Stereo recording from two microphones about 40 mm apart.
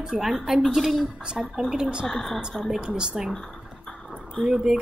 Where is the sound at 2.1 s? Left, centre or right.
Centre.